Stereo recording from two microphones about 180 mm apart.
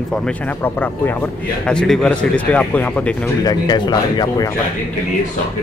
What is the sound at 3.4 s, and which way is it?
Speech, 20° left (ahead or behind).